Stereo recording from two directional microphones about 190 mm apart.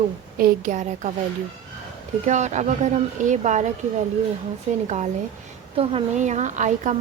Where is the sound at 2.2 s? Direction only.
40° right (ahead or behind).